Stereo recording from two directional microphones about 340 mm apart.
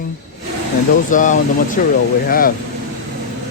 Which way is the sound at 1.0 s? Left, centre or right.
Left.